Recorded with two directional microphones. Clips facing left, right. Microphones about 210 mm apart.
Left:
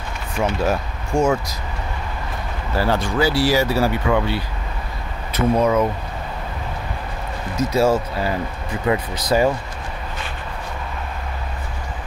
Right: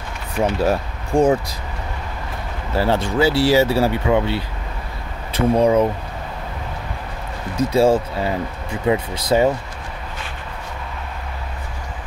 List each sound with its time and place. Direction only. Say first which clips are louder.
0.4 s speech: right 2 dB; 35° right (ahead or behind)
2.7 s speech: right 2 dB; 25° right (ahead or behind)
7.5 s speech: right 2 dB; 30° right (ahead or behind)